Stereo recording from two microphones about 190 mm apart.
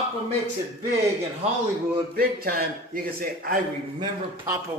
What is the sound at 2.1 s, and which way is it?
A man's voice, 50° right (ahead or behind).